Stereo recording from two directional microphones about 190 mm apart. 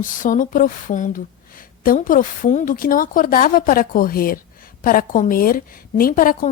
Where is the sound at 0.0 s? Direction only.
45° left (ahead or behind).